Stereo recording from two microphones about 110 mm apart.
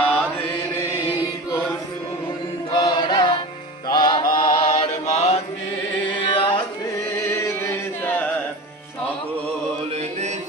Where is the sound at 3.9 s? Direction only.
40° left (ahead or behind).